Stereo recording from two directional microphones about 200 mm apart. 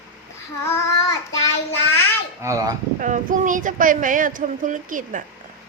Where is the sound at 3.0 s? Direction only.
40° right (ahead or behind).